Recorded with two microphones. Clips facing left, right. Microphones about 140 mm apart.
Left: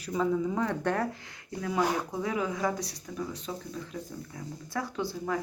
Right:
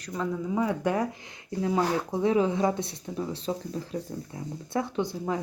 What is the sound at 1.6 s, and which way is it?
Speech, 25° right (ahead or behind).